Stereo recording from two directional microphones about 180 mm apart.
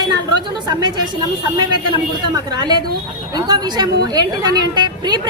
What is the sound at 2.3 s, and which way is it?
A woman's voice, 25° right (ahead or behind).